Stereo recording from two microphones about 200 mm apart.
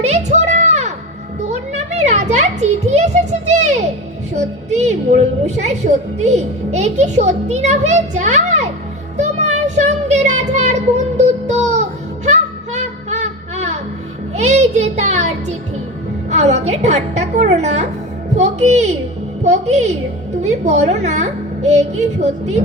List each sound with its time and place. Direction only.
0.0 s a sound: 35° right (ahead or behind)
4.4 s a woman's voice: 35° right (ahead or behind)
9.1 s child singing: 35° right (ahead or behind)
14.3 s music: 35° right (ahead or behind)
16.3 s a woman's voice: 35° right (ahead or behind)